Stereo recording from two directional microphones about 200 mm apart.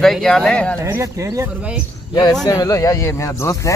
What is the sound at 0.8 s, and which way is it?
Speech, 15° right (ahead or behind).